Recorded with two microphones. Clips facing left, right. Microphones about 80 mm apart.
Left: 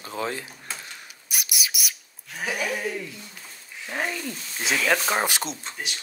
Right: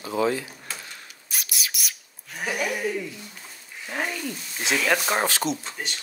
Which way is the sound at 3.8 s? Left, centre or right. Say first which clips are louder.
Even; centre.